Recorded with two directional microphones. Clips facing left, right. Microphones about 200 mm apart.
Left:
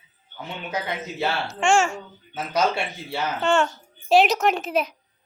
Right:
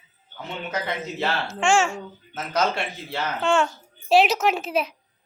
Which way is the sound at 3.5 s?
Centre (ahead or behind).